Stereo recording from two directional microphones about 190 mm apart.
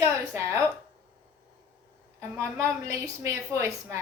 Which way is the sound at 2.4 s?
15° right (ahead or behind).